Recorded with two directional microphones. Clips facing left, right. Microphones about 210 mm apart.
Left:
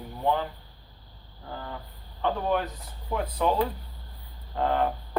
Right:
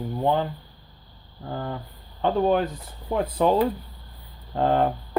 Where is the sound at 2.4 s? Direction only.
30° right (ahead or behind).